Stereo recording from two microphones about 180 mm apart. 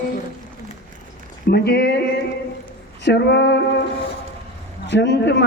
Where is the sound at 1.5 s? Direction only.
65° left (ahead or behind).